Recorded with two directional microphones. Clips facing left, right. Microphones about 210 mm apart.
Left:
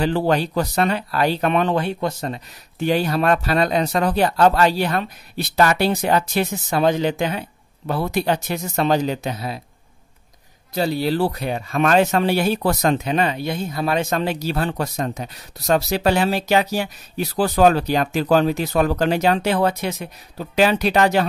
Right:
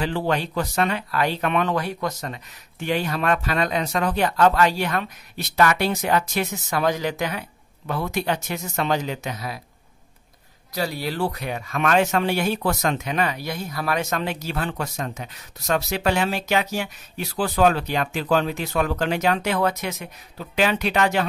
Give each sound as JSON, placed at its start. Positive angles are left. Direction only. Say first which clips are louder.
{"t": 0.0, "sound": "speech", "louder": "left 5 dB", "side_deg": 40}
{"t": 10.7, "sound": "speech", "louder": "left 6 dB", "side_deg": 25}